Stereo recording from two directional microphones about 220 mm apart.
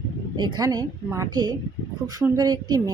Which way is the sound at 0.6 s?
15° right (ahead or behind).